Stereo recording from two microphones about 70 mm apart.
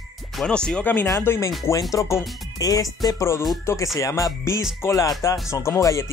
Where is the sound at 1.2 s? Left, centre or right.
Left.